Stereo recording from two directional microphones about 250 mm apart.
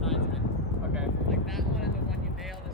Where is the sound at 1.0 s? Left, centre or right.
Centre.